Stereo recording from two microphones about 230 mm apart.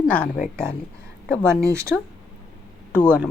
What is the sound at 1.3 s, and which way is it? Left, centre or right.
Speech, centre.